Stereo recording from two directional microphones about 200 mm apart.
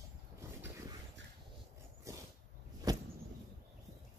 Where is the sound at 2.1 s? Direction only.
15° right (ahead or behind).